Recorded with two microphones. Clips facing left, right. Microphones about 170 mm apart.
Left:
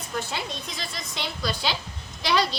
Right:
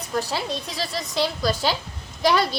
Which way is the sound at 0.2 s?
35° right (ahead or behind).